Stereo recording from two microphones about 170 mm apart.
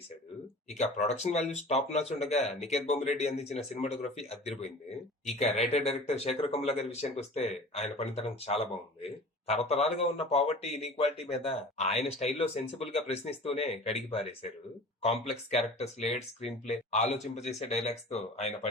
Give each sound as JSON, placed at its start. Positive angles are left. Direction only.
{"t": 0.7, "sound": "speech", "side_deg": 40}